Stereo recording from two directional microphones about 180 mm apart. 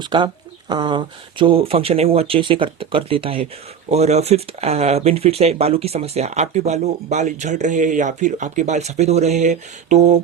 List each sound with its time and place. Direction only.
0.0 s speech: 25° right (ahead or behind); by 10.2 s 40° right (ahead or behind)